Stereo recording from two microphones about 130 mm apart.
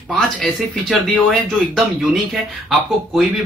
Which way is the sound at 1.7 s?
Centre (ahead or behind).